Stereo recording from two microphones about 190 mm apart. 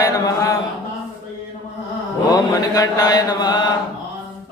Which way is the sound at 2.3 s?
20° left (ahead or behind).